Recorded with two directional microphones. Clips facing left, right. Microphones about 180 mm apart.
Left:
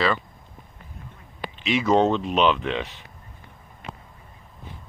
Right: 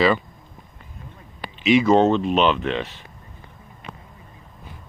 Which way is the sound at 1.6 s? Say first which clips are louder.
Right 4 dB; 5° right (ahead or behind).